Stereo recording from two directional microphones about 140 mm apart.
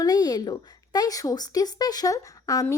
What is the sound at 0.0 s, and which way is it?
A woman's voice, 25° left (ahead or behind).